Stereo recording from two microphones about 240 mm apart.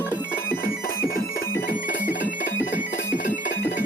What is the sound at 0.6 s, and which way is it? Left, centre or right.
Music, left.